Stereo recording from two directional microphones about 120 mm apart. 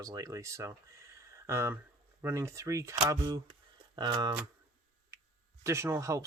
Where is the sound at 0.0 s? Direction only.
30° right (ahead or behind).